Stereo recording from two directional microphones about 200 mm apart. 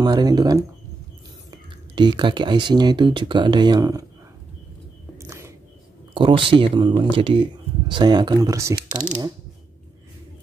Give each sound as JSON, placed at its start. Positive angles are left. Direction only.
{"t": 0.0, "sound": "speech", "side_deg": -20}
{"t": 5.1, "sound": "a sound", "side_deg": -15}
{"t": 6.1, "sound": "speech", "side_deg": -25}